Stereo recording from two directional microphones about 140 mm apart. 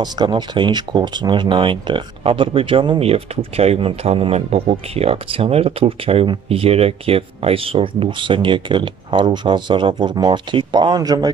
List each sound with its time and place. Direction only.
0.0 s speech: 30° right (ahead or behind)